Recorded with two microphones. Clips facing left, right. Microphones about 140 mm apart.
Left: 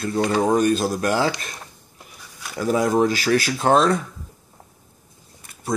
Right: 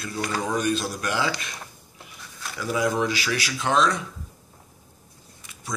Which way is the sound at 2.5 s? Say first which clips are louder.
Left 6 dB; 45° left (ahead or behind).